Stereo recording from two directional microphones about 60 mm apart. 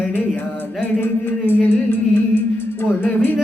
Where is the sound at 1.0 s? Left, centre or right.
Left.